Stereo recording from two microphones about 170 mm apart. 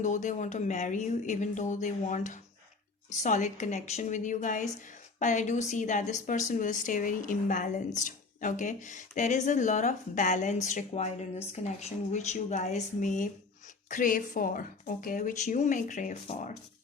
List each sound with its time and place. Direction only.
0.0 s a woman's voice: 45° left (ahead or behind)